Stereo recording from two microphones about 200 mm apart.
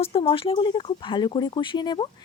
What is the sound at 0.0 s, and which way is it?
Speech, 25° left (ahead or behind).